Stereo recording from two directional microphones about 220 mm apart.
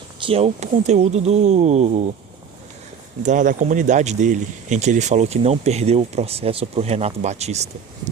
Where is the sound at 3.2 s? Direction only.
35° right (ahead or behind).